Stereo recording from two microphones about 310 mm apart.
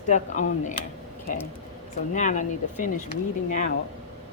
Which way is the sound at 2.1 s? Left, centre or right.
Left.